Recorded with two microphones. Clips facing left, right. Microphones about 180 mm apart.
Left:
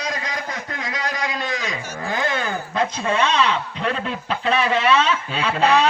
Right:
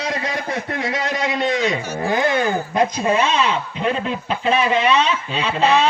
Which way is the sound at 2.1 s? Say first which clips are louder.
Right 6 dB; 20° right (ahead or behind).